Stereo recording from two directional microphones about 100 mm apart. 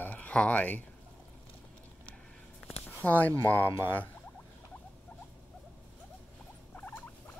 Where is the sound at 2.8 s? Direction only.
15° left (ahead or behind).